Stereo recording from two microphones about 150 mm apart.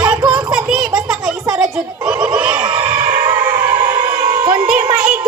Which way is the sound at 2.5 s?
30° right (ahead or behind).